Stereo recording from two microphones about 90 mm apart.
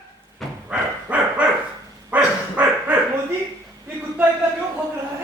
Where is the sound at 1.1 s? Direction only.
15° right (ahead or behind).